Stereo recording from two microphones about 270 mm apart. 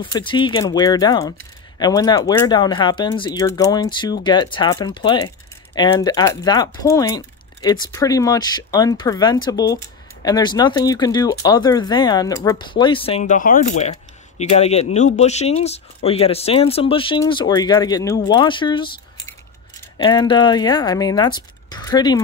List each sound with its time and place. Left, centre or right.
0.0 s speech: centre